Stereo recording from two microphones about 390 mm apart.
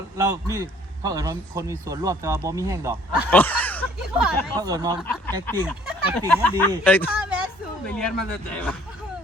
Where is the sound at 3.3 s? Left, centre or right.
Centre.